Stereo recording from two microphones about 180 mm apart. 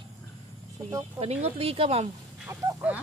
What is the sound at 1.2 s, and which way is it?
Speech, 35° right (ahead or behind).